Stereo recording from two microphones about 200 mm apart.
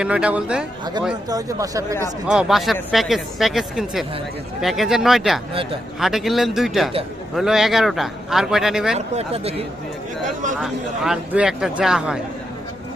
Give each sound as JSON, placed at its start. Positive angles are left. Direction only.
{"t": 0.0, "sound": "speech", "side_deg": -5}
{"t": 1.3, "sound": "speech", "side_deg": -15}
{"t": 2.2, "sound": "speech", "side_deg": -5}
{"t": 9.0, "sound": "speech", "side_deg": -30}
{"t": 10.6, "sound": "speech", "side_deg": 0}